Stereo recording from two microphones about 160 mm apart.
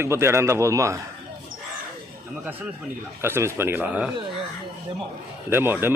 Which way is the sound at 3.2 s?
15° right (ahead or behind).